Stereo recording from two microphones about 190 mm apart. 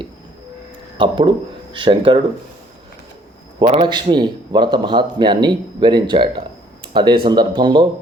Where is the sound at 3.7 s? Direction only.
25° right (ahead or behind).